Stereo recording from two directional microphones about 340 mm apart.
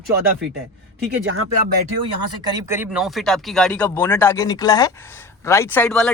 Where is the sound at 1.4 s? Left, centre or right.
Right.